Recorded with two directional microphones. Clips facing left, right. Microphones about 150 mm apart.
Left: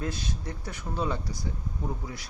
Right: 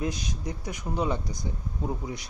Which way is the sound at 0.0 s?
15° right (ahead or behind).